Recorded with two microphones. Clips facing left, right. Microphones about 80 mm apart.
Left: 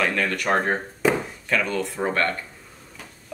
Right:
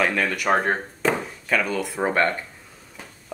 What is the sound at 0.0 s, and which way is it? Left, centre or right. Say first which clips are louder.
Speech: right 1 dB; centre.